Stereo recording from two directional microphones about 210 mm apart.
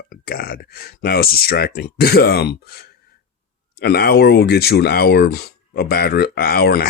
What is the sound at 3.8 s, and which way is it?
Speech, 50° left (ahead or behind).